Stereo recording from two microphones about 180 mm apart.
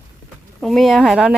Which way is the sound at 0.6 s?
Centre (ahead or behind).